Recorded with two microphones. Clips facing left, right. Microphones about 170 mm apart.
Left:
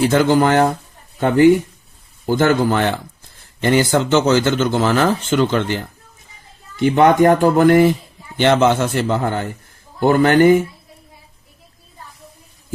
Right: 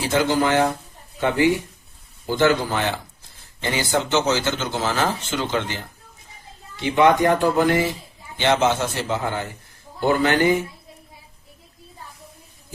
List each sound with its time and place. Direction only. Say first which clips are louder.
0.0 s speech: left 6 dB; 55° left (ahead or behind)